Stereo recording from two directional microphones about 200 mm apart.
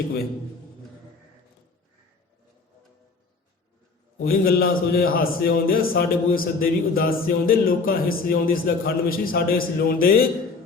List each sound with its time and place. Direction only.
4.2 s a man's voice: 50° left (ahead or behind)